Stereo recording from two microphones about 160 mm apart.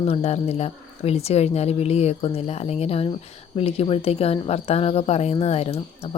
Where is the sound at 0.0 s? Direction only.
40° left (ahead or behind).